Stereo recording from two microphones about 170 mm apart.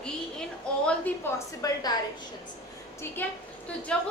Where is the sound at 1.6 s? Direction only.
20° left (ahead or behind).